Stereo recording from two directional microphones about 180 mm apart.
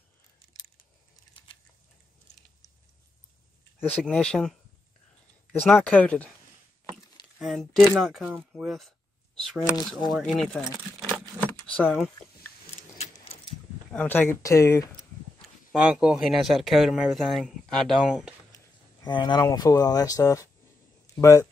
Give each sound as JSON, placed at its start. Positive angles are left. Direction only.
{"t": 3.9, "sound": "speech", "side_deg": 5}
{"t": 5.7, "sound": "speech", "side_deg": 5}
{"t": 7.3, "sound": "speech", "side_deg": 0}
{"t": 11.8, "sound": "speech", "side_deg": 0}
{"t": 12.9, "sound": "keys jangling", "side_deg": 35}
{"t": 13.9, "sound": "speech", "side_deg": 10}
{"t": 15.7, "sound": "speech", "side_deg": -5}
{"t": 19.0, "sound": "speech", "side_deg": 25}